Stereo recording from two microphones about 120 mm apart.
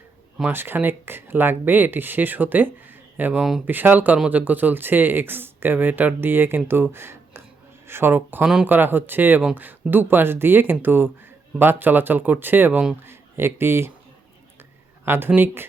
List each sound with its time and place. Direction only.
0.4 s speech: 15° right (ahead or behind)
15.0 s speech: 20° right (ahead or behind)